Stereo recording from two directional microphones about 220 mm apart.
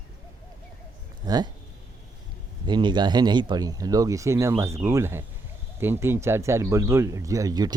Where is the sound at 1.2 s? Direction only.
20° right (ahead or behind).